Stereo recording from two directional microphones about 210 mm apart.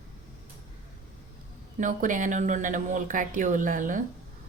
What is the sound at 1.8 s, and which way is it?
A woman's voice, 40° right (ahead or behind).